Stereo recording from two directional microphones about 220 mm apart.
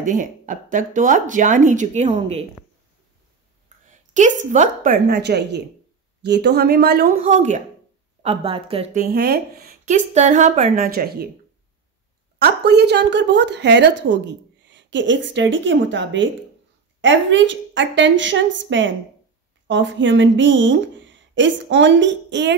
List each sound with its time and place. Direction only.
0.0 s speech: 35° right (ahead or behind)
3.6 s a woman's voice: 35° right (ahead or behind)
9.0 s speech: 45° right (ahead or behind)
12.4 s a woman's voice: 50° right (ahead or behind)